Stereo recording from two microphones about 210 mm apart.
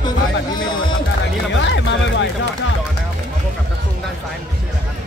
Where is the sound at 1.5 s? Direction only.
60° left (ahead or behind).